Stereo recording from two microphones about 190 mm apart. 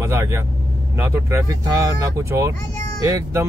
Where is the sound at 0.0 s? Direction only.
15° right (ahead or behind).